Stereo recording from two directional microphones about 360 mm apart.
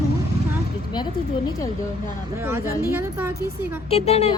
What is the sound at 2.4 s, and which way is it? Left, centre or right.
Speech, centre.